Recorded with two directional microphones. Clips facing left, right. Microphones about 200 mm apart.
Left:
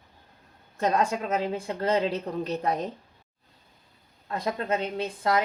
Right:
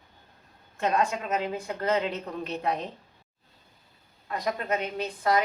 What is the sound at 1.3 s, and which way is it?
A woman's voice, 30° left (ahead or behind).